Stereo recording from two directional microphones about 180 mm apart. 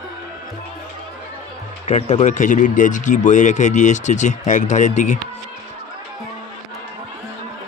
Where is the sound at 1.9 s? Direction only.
40° left (ahead or behind).